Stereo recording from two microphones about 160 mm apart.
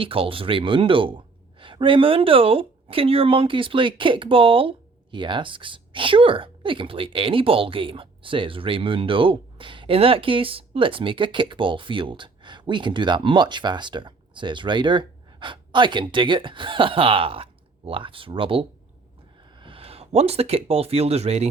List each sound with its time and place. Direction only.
0.0 s a woman's voice: 35° right (ahead or behind)